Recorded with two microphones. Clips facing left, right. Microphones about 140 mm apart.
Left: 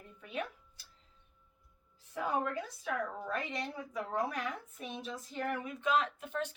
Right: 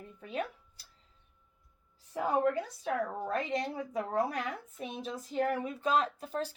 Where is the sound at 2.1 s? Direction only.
35° right (ahead or behind).